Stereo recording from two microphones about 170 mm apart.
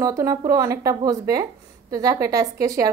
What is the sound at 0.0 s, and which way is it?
A woman's voice, 20° right (ahead or behind).